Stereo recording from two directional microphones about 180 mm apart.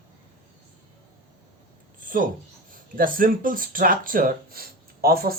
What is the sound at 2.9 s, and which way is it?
Speech, 50° right (ahead or behind).